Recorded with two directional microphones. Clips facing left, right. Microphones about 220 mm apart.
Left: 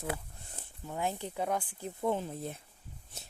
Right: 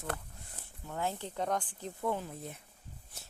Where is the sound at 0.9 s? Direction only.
15° left (ahead or behind).